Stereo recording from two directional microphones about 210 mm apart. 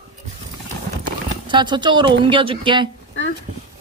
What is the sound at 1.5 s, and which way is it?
Speech, 20° right (ahead or behind).